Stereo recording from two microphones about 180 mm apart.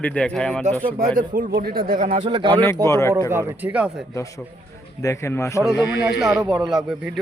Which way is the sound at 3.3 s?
10° right (ahead or behind).